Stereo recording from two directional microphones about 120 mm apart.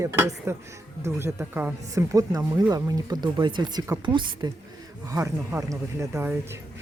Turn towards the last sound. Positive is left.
turn(degrees=-20)  # may be behind; listen again after turning